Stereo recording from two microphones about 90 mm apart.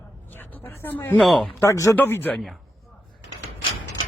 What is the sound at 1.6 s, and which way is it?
Speech, 35° left (ahead or behind).